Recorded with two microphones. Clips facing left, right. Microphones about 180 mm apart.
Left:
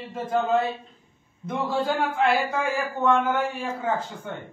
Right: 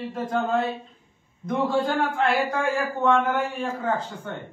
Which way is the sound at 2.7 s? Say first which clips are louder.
Even; centre (ahead or behind).